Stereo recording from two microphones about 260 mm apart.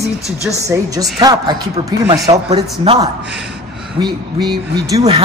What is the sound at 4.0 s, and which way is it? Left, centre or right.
A man's voice, centre.